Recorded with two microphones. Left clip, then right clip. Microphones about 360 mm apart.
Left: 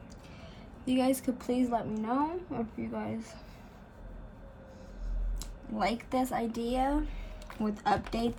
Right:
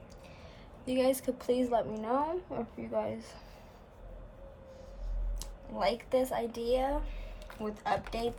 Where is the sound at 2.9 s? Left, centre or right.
Right.